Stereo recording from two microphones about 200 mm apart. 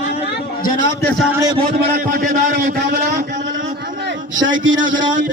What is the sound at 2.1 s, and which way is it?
A man's voice, 40° right (ahead or behind).